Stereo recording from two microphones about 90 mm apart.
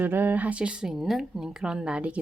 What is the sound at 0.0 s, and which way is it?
Speech, 20° right (ahead or behind).